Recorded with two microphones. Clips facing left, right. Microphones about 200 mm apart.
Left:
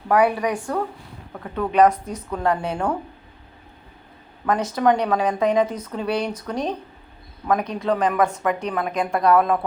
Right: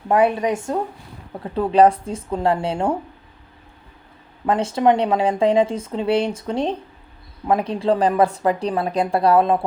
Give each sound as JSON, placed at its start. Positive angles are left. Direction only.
{"t": 0.1, "sound": "speech", "side_deg": -25}
{"t": 4.4, "sound": "speech", "side_deg": -25}